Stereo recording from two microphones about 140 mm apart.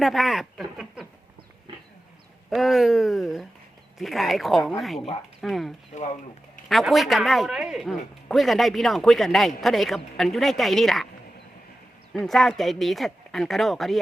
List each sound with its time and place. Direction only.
0.0 s speech: centre (ahead or behind)
2.5 s speech: centre (ahead or behind)
5.9 s speech: 55° left (ahead or behind)
6.7 s speech: centre (ahead or behind)
12.1 s speech: centre (ahead or behind)